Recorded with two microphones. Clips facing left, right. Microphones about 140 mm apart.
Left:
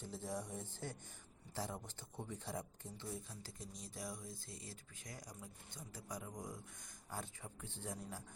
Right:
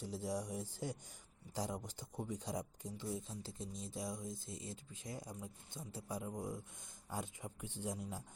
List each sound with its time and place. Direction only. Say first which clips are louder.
0.0 s speech: right 4 dB; 10° right (ahead or behind)